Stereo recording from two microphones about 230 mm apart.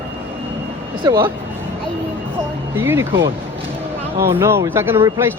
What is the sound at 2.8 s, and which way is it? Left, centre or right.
Speech, centre.